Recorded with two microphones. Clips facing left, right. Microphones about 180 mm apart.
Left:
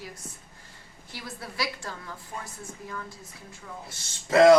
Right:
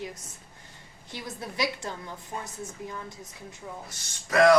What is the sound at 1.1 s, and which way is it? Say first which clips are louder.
A woman's voice: right 2 dB; 20° right (ahead or behind).